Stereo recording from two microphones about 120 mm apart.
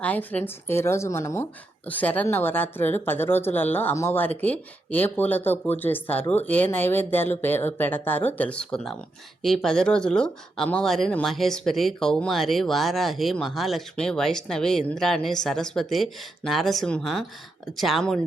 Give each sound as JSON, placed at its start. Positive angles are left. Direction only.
{"t": 0.0, "sound": "a woman's voice", "side_deg": 15}